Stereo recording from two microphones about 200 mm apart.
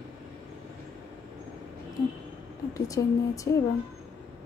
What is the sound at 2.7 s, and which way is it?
Speech, 15° left (ahead or behind).